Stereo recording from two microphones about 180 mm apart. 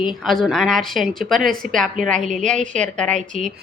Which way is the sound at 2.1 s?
45° right (ahead or behind).